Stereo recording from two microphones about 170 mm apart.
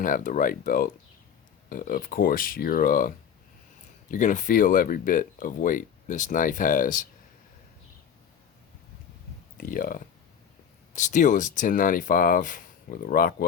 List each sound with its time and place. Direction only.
0.0 s speech: 55° left (ahead or behind)
4.1 s speech: 50° left (ahead or behind)
9.6 s speech: 55° left (ahead or behind)
10.9 s speech: 45° left (ahead or behind)